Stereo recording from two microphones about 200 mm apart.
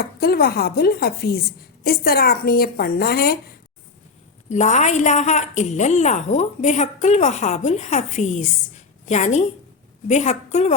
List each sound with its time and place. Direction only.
0.0 s speech: 50° left (ahead or behind)
4.4 s a woman's voice: 35° left (ahead or behind)